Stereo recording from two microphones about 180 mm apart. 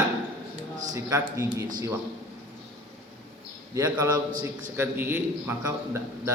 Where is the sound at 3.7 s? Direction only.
20° right (ahead or behind).